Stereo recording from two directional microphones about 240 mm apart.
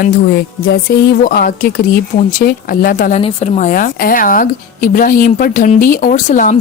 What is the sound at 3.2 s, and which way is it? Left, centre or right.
A woman's voice, left.